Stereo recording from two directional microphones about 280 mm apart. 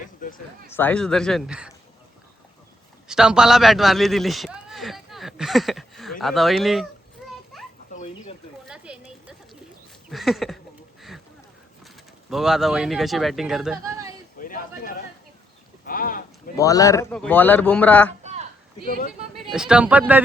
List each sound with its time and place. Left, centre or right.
0.2 s a sound: left
0.7 s speech: centre
3.1 s speech: centre
7.5 s children playing: centre
7.9 s chicken: left
8.6 s a sound: centre
10.1 s speech: centre
12.3 s speech: centre
14.3 s a sound: left
16.6 s speech: centre
18.2 s a sound: right
19.5 s speech: centre